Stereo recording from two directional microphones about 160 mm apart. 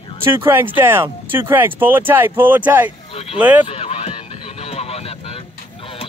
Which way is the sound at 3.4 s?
10° right (ahead or behind).